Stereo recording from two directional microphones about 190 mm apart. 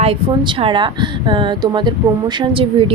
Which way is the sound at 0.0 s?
30° right (ahead or behind).